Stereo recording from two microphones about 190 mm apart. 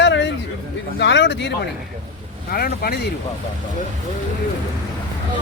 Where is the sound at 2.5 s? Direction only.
50° left (ahead or behind).